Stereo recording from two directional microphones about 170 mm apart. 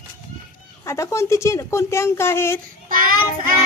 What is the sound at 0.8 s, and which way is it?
Speech, 15° left (ahead or behind).